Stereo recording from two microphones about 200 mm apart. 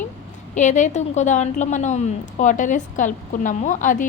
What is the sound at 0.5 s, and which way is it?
A woman's voice, 35° left (ahead or behind).